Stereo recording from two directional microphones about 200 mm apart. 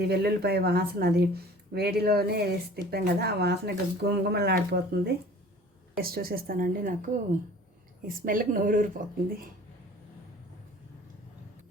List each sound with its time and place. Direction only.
0.0 s speech: 55° right (ahead or behind)